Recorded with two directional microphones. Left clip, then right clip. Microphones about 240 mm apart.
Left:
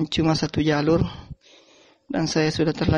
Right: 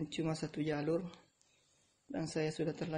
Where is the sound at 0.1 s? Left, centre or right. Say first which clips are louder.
Left 18 dB; left.